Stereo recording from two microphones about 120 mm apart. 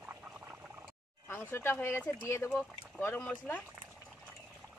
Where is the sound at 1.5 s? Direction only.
20° left (ahead or behind).